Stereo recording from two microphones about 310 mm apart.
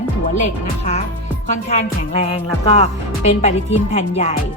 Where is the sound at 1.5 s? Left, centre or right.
Left.